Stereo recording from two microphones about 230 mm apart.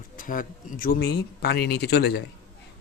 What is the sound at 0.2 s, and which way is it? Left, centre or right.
Speech, left.